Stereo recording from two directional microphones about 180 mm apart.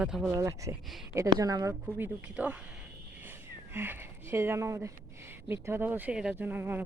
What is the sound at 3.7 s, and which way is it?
Speech, 10° right (ahead or behind).